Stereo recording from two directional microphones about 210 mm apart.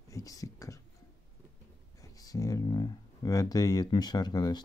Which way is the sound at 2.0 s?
15° left (ahead or behind).